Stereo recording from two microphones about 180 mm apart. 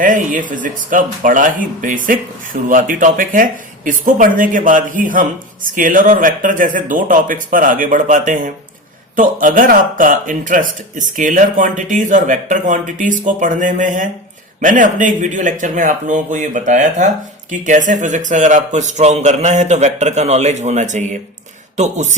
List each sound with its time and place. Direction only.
0.0 s a man's voice: 50° right (ahead or behind)